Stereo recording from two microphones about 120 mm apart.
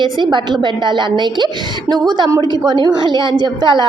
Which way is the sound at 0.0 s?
40° right (ahead or behind).